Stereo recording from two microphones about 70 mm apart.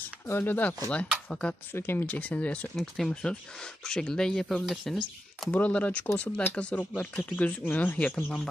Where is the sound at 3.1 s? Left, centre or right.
Centre.